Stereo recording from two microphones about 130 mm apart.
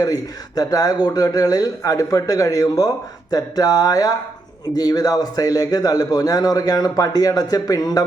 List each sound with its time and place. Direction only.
0.0 s a man's voice: 30° left (ahead or behind)